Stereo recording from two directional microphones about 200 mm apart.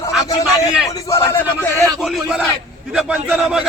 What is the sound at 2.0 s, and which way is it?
A man's voice, centre (ahead or behind).